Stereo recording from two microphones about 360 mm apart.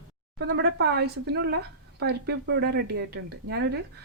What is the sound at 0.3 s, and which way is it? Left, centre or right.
Speech, right.